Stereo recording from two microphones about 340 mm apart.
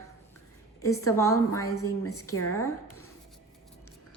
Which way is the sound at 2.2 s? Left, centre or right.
Left.